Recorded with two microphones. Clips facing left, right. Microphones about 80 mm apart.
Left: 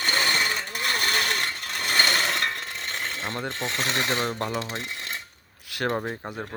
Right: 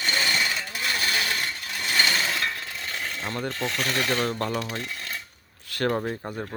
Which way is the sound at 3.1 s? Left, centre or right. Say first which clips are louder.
Right 2 dB; left.